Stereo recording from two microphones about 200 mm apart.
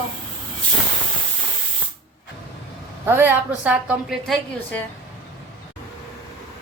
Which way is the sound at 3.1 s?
10° right (ahead or behind).